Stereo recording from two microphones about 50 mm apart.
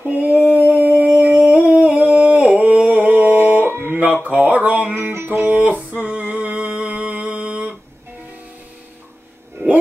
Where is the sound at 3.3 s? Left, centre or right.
Right.